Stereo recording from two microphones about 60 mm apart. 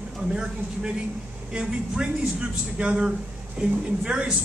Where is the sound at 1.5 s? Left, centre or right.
Centre.